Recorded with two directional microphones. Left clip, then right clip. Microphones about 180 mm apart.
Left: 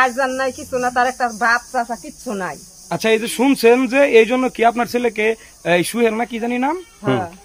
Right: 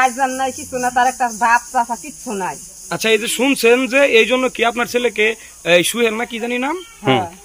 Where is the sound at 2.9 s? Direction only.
70° left (ahead or behind).